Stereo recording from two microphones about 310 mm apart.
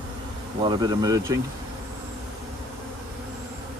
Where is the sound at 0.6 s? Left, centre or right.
Centre.